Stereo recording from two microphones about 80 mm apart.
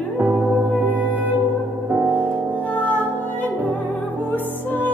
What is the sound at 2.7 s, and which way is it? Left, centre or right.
Music, centre.